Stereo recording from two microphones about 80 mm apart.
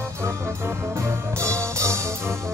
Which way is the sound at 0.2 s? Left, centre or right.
Right.